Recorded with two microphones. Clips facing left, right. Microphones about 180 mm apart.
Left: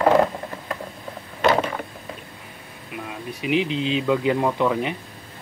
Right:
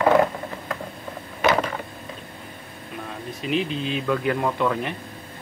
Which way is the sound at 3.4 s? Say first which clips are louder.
Left 3 dB; 15° left (ahead or behind).